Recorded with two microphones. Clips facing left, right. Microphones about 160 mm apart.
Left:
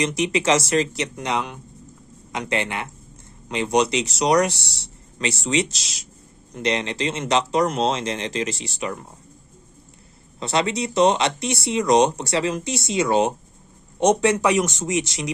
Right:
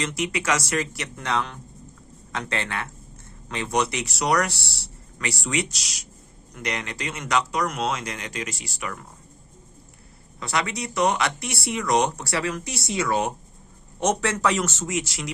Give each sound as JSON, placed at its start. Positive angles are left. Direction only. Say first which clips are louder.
{"t": 0.0, "sound": "speech", "louder": "left 6 dB", "side_deg": 20}
{"t": 10.4, "sound": "speech", "louder": "left 5 dB", "side_deg": 25}